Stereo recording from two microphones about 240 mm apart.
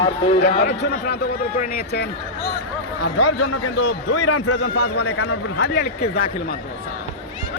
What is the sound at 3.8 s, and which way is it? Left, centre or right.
Speech, left.